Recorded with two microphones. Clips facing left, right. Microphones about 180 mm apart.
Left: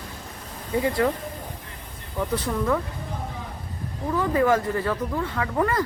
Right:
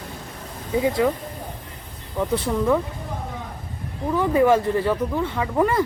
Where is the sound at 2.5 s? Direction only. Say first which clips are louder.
Right 3 dB; 15° right (ahead or behind).